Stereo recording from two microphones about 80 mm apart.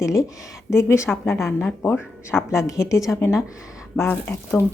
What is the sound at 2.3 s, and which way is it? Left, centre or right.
Speech, left.